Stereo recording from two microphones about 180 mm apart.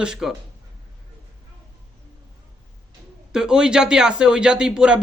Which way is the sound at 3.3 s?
5° right (ahead or behind).